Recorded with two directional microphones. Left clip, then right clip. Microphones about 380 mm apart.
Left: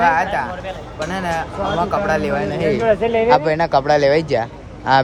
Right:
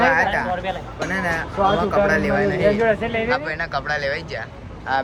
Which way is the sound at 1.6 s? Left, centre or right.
Centre.